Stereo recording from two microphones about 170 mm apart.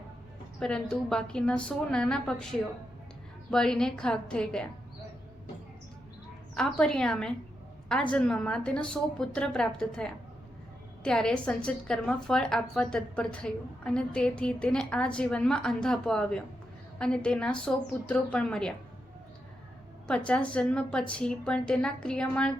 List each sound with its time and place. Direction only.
0.6 s a woman's voice: 5° left (ahead or behind)
6.5 s a woman's voice: 5° left (ahead or behind)
20.1 s a woman's voice: 5° left (ahead or behind)